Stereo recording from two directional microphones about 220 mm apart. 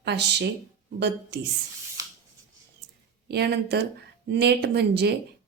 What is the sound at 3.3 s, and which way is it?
A woman's voice, 45° right (ahead or behind).